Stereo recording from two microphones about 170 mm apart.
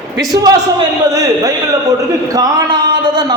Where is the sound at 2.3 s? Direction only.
25° right (ahead or behind).